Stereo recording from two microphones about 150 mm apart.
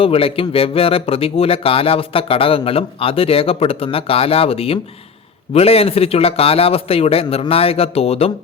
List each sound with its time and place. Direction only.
0.0 s speech: 40° left (ahead or behind)